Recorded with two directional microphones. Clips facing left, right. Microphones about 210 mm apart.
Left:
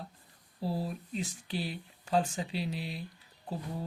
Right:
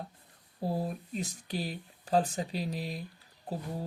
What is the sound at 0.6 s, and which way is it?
Speech, 50° right (ahead or behind).